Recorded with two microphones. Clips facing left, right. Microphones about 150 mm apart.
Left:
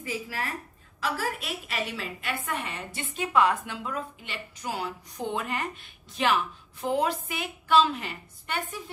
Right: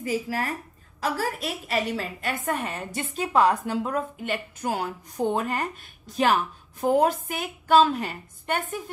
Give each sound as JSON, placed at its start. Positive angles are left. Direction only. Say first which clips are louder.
{"t": 0.0, "sound": "a woman's voice", "louder": "right 6 dB", "side_deg": -40}